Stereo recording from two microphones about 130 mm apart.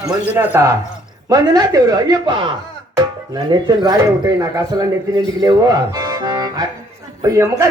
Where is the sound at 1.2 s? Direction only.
30° right (ahead or behind).